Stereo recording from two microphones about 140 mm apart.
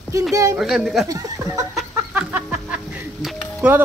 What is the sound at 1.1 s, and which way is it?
Speech, 25° right (ahead or behind).